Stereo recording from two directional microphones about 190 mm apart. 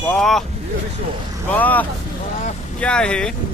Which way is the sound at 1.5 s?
10° left (ahead or behind).